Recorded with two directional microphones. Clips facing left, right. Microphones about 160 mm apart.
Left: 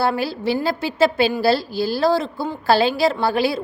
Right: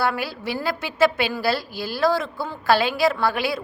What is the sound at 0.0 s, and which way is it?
A woman's voice, 30° left (ahead or behind).